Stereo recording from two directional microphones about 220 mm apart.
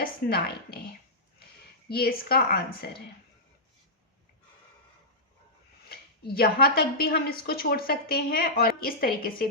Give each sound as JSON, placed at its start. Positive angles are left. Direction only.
{"t": 0.0, "sound": "speech", "side_deg": 45}
{"t": 1.9, "sound": "a woman's voice", "side_deg": 45}
{"t": 5.9, "sound": "a woman's voice", "side_deg": 45}